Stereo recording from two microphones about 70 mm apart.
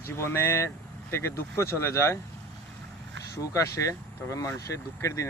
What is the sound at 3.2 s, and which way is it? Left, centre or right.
Speech, left.